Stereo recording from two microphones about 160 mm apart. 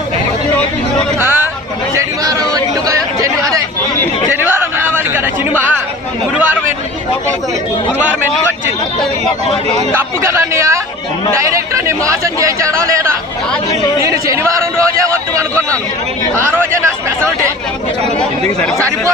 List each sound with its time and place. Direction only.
1.2 s a sound: 15° right (ahead or behind)
2.0 s chatter: 20° right (ahead or behind)
4.5 s a sound: 15° right (ahead or behind)
6.3 s chatter: 10° right (ahead or behind)
10.2 s speech: 15° right (ahead or behind)
16.5 s speech: 15° right (ahead or behind)